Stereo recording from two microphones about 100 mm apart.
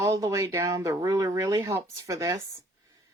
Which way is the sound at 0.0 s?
35° right (ahead or behind).